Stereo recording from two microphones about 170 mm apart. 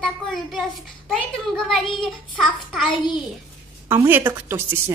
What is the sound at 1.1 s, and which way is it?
A child's voice, centre (ahead or behind).